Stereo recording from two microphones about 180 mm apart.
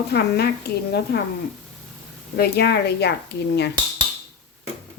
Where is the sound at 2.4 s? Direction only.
65° left (ahead or behind).